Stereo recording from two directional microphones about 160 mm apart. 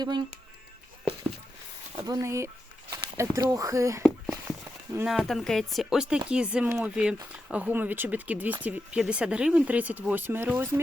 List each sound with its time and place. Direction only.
0.0 s speech: 25° right (ahead or behind)
2.0 s speech: 25° right (ahead or behind)
5.0 s speech: centre (ahead or behind)